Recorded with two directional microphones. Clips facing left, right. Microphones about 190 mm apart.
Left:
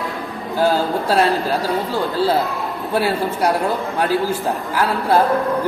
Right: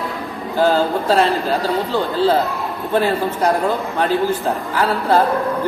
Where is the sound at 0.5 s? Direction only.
10° left (ahead or behind).